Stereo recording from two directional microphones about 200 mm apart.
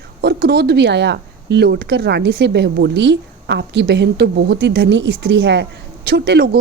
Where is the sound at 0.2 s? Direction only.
55° right (ahead or behind).